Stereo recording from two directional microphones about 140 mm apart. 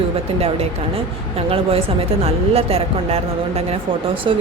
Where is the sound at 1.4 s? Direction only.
45° right (ahead or behind).